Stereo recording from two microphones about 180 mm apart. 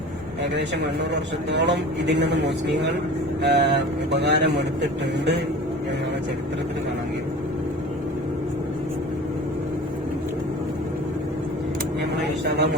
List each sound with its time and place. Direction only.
1.1 s speech: 70° right (ahead or behind)
12.2 s vehicle: 70° right (ahead or behind)